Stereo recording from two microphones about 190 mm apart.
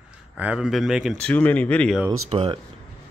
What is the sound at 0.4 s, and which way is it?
Speech, 5° right (ahead or behind).